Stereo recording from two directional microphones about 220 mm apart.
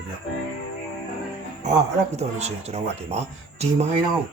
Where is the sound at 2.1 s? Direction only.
30° right (ahead or behind).